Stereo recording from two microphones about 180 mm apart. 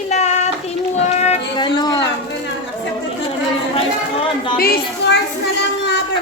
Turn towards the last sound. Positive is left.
turn(degrees=70)  # may be behind; listen again after turning